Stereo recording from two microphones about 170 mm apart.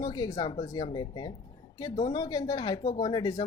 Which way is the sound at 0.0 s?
25° left (ahead or behind).